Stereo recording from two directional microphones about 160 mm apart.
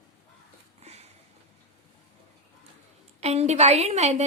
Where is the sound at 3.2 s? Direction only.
40° right (ahead or behind).